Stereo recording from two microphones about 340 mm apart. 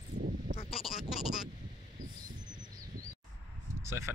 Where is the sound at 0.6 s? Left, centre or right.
Centre.